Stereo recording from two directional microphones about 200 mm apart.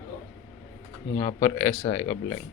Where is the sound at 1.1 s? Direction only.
15° left (ahead or behind).